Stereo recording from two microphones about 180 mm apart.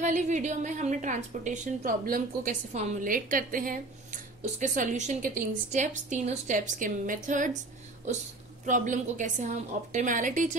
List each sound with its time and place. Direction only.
0.0 s a woman's voice: 40° right (ahead or behind)
8.6 s a woman's voice: 45° right (ahead or behind)